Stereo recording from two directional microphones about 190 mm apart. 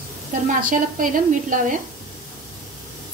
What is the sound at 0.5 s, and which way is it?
A woman's voice, 45° right (ahead or behind).